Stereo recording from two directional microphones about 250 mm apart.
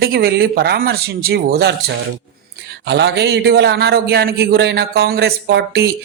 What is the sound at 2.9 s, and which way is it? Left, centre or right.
A man's voice, right.